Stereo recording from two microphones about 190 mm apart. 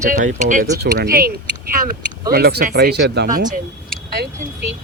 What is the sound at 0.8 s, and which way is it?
Speech, 55° right (ahead or behind).